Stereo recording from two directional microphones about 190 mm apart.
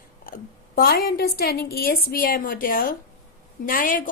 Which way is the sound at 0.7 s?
50° left (ahead or behind).